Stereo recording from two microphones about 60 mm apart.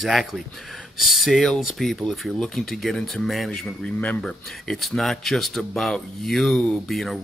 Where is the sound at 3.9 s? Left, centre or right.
Left.